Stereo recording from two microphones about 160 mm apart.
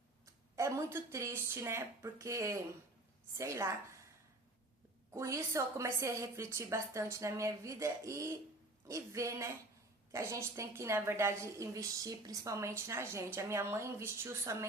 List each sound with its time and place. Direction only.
0.5 s a woman's voice: 15° right (ahead or behind)
5.1 s a woman's voice: 20° right (ahead or behind)